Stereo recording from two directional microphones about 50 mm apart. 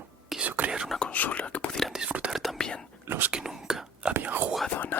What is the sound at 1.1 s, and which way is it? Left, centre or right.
Whispering, left.